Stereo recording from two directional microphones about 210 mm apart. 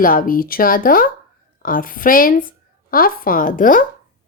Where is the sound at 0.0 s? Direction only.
40° left (ahead or behind).